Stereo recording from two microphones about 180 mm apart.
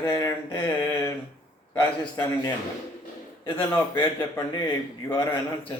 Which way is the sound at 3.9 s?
10° left (ahead or behind).